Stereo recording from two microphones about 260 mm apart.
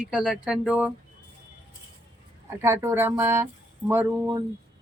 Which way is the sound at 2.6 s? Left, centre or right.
Centre.